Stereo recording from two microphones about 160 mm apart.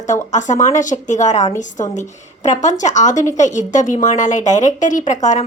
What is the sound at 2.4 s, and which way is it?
Speech, 50° left (ahead or behind).